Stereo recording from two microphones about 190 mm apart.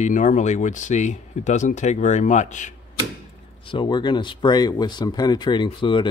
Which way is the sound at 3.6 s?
25° left (ahead or behind).